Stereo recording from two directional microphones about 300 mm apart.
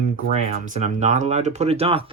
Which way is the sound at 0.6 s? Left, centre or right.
Right.